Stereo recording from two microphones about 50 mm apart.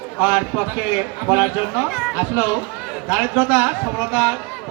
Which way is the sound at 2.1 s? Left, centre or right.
Right.